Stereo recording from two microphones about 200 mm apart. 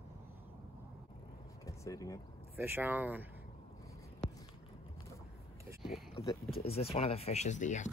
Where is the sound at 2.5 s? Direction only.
10° right (ahead or behind).